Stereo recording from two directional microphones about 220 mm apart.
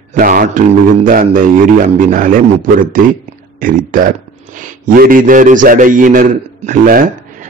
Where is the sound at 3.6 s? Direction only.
40° right (ahead or behind).